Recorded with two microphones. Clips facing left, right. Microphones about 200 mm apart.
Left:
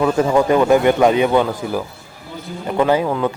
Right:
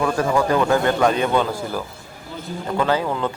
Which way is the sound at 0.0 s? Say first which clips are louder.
Left 4 dB; 20° left (ahead or behind).